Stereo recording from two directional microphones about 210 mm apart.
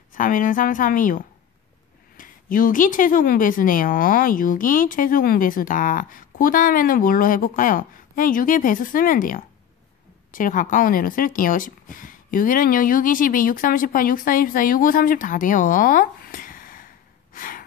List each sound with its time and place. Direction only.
0.1 s a woman's voice: 40° left (ahead or behind)
17.3 s gasp: 40° left (ahead or behind)